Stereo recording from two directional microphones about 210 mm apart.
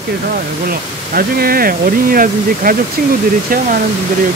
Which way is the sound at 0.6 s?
45° right (ahead or behind).